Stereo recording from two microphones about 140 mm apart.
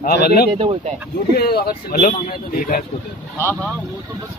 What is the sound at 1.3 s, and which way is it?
Speech, 90° left.